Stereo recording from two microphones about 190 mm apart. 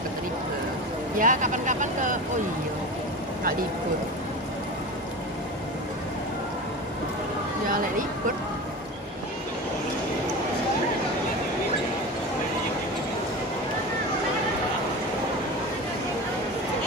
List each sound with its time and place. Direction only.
1.1 s speech: 45° right (ahead or behind)
7.6 s speech: 45° right (ahead or behind)